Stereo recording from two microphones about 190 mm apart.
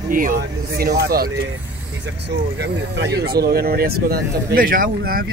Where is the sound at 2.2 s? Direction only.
65° right (ahead or behind).